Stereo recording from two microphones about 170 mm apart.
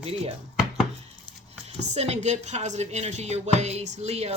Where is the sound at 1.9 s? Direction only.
40° right (ahead or behind).